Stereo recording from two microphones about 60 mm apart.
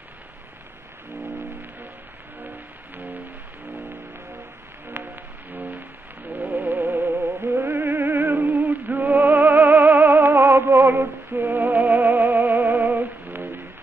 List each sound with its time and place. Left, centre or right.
5.5 s music: right
6.3 s a sound: right
7.1 s music: right